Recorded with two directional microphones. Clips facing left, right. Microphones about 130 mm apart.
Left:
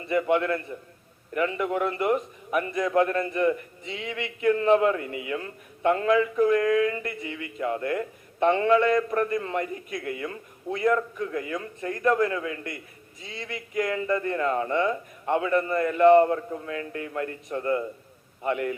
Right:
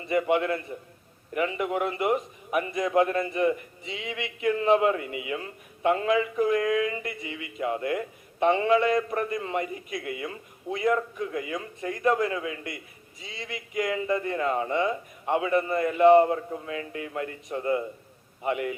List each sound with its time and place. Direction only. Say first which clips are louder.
0.0 s a man's voice: left 1 dB; 20° right (ahead or behind)